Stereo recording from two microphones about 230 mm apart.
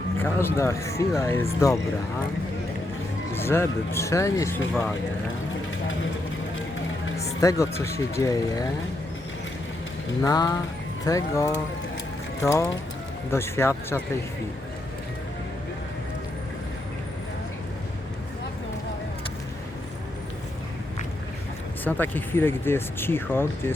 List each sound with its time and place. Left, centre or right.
0.2 s speech: centre
3.3 s speech: centre
7.4 s speech: centre
10.2 s speech: centre
21.8 s speech: centre